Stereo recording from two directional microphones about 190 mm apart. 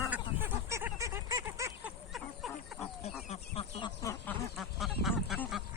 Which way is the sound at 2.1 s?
Centre (ahead or behind).